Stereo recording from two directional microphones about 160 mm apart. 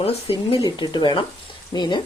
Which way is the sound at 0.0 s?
40° left (ahead or behind).